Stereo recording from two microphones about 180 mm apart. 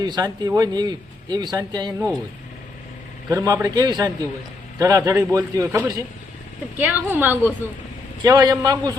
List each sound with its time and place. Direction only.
0.0 s a man's voice: 20° right (ahead or behind)
3.2 s a man's voice: 20° right (ahead or behind)